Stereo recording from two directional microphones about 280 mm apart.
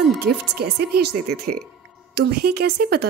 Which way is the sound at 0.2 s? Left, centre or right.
Right.